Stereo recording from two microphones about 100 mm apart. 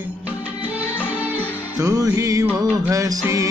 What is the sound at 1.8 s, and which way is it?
Music, 35° right (ahead or behind).